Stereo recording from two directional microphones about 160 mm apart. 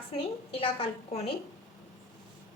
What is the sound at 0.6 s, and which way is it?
Speech, 40° left (ahead or behind).